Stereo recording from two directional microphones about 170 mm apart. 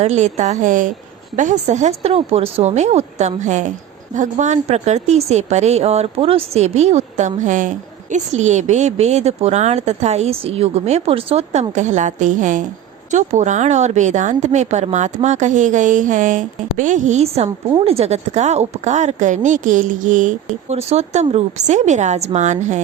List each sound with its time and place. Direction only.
0.0 s a woman's voice: 40° right (ahead or behind)